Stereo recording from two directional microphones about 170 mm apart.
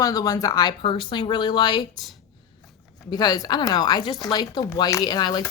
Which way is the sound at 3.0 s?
25° left (ahead or behind).